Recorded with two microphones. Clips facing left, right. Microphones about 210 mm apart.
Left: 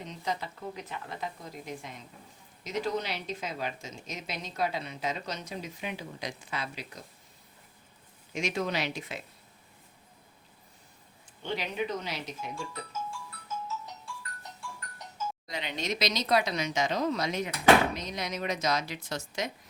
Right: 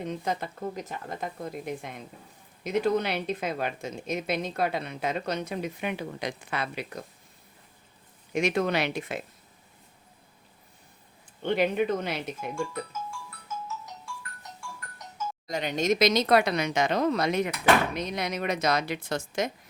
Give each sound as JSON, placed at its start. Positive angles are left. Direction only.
{"t": 0.0, "sound": "speech", "side_deg": -55}
{"t": 8.3, "sound": "speech", "side_deg": -60}
{"t": 11.4, "sound": "speech", "side_deg": -55}
{"t": 15.4, "sound": "speech", "side_deg": -45}